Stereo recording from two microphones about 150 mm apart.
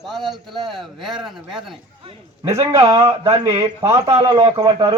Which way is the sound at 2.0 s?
40° right (ahead or behind).